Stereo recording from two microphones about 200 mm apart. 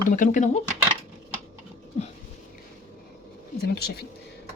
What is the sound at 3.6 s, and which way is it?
Speech, 50° left (ahead or behind).